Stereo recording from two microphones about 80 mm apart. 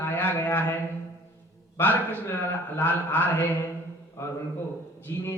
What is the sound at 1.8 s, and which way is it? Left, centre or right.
A man's voice, left.